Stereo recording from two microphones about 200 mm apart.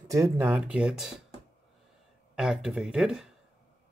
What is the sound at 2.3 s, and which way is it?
Speech, 5° right (ahead or behind).